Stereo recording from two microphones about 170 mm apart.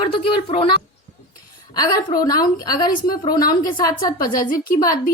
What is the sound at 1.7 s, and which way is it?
A woman's voice, 20° left (ahead or behind).